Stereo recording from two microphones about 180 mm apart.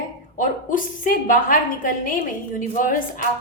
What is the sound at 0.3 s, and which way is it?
A woman's voice, 50° left (ahead or behind).